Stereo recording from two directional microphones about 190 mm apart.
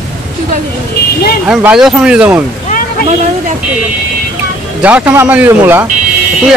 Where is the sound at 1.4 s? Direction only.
5° right (ahead or behind).